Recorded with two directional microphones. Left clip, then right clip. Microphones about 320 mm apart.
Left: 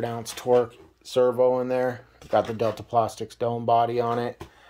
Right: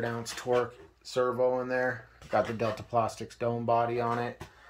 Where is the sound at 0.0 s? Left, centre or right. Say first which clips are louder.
Left 5 dB; left.